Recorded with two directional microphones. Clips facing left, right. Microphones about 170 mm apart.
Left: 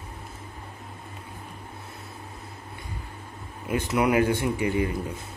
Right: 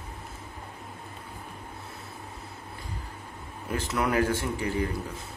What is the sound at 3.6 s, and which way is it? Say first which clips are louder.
Speech: left 5 dB; 15° left (ahead or behind).